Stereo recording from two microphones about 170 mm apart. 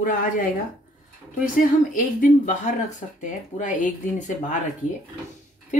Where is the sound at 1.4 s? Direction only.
50° left (ahead or behind).